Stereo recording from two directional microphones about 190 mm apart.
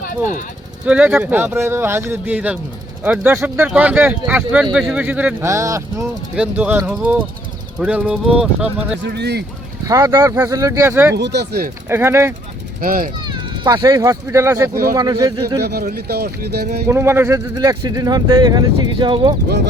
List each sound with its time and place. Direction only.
0.9 s speech: 5° right (ahead or behind)
9.0 s speech: 60° right (ahead or behind)
9.8 s speech: 15° right (ahead or behind)
11.1 s speech: 65° right (ahead or behind)
11.9 s speech: 15° right (ahead or behind)
12.8 s speech: 50° right (ahead or behind)
13.1 s speech: 25° right (ahead or behind)
15.6 s speech: 55° right (ahead or behind)
16.9 s speech: 10° right (ahead or behind)